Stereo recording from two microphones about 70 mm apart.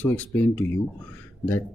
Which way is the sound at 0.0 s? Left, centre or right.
Left.